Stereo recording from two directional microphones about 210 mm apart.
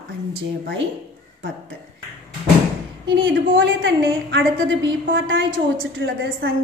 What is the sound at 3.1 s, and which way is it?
A woman's voice, 60° right (ahead or behind).